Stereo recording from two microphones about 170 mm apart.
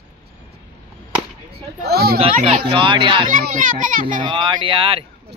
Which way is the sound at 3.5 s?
50° right (ahead or behind).